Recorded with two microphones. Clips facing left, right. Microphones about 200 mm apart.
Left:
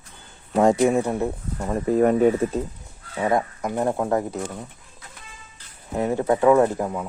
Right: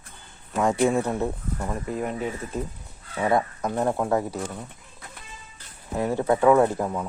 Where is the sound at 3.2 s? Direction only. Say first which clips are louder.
Left 1 dB; 15° left (ahead or behind).